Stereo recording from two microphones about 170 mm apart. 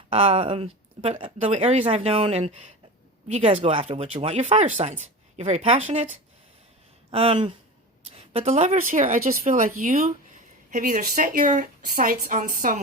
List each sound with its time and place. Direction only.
0.1 s speech: 35° right (ahead or behind); by 12.8 s 50° right (ahead or behind)